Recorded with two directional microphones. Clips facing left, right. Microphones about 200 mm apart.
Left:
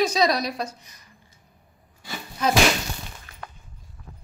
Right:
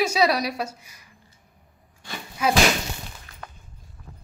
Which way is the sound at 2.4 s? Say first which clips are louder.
Even; 10° right (ahead or behind).